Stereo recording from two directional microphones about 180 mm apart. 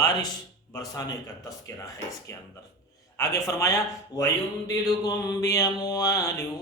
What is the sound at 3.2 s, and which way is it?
A man's voice, 20° left (ahead or behind).